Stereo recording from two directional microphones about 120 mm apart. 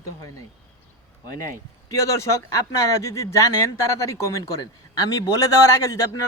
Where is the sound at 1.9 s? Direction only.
25° left (ahead or behind).